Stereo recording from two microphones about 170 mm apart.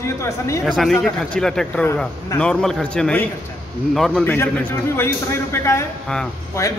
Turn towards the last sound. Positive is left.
turn(degrees=15)  # may be behind; listen again after turning